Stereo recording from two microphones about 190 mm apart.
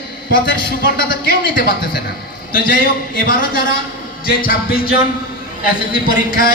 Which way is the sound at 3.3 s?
45° left (ahead or behind).